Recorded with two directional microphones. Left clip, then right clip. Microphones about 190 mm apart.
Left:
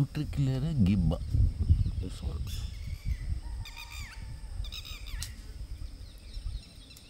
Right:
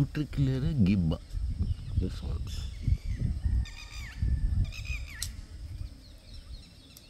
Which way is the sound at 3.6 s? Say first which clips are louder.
Left 4 dB; 60° left (ahead or behind).